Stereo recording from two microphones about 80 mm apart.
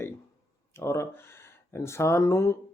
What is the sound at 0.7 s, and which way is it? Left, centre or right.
Speech, left.